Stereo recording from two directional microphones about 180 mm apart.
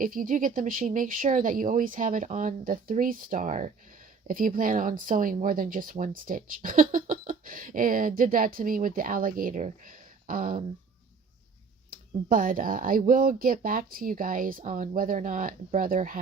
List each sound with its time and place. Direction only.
0.0 s speech: 50° right (ahead or behind)
11.9 s speech: 50° right (ahead or behind)